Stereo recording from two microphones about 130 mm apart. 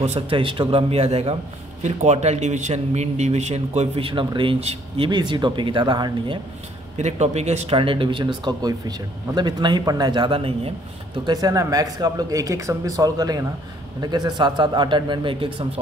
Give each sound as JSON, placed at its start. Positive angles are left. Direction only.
{"t": 0.0, "sound": "speech", "side_deg": -50}
{"t": 1.8, "sound": "a man's voice", "side_deg": -60}
{"t": 5.1, "sound": "speech", "side_deg": -35}
{"t": 7.0, "sound": "a man's voice", "side_deg": -60}
{"t": 7.7, "sound": "speech", "side_deg": -40}
{"t": 11.2, "sound": "speech", "side_deg": -30}